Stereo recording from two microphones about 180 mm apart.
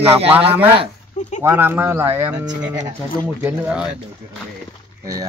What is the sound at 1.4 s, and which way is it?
Speech, 10° right (ahead or behind).